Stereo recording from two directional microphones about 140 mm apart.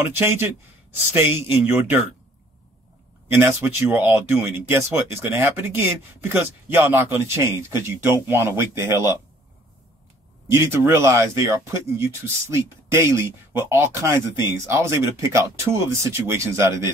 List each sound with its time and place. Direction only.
0.0 s speech: 15° right (ahead or behind)
3.3 s speech: 15° right (ahead or behind)
10.5 s speech: 20° right (ahead or behind)